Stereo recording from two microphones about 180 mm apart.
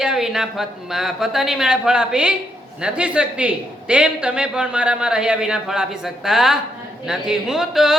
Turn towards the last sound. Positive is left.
turn(degrees=0)  # may be behind; listen again after turning